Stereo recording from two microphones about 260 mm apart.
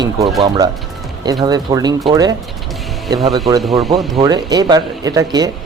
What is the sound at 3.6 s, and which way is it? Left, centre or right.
Speech, centre.